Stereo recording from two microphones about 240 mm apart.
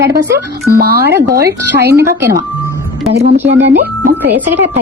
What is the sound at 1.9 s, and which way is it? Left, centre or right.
Speech, centre.